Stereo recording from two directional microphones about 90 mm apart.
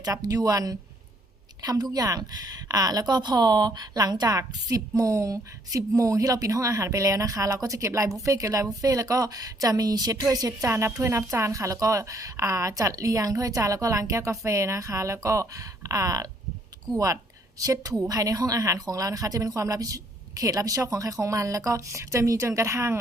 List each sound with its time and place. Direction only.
0.0 s a woman's voice: 45° right (ahead or behind)